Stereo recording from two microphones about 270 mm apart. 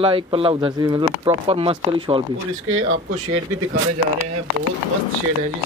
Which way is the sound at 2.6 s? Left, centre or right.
Right.